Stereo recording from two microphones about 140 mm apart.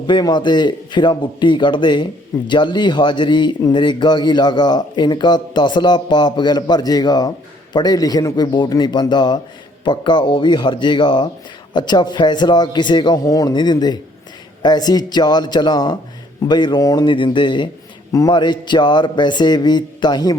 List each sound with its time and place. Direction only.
0.1 s a man's voice: 30° left (ahead or behind)